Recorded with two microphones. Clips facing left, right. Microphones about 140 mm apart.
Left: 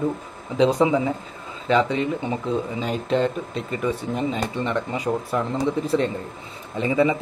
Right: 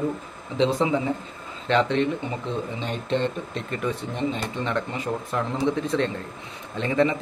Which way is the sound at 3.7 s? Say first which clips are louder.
Left 4 dB; 5° left (ahead or behind).